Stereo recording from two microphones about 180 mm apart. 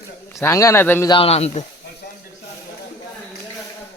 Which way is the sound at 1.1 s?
35° left (ahead or behind).